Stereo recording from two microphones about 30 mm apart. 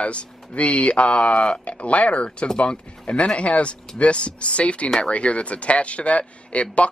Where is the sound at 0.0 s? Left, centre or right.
Left.